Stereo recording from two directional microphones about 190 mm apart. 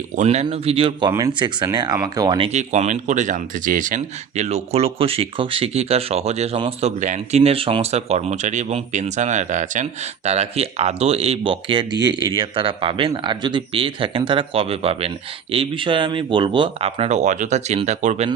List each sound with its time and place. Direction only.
0.2 s speech: 35° right (ahead or behind); by 2.5 s 20° right (ahead or behind)
2.5 s speech: 35° right (ahead or behind)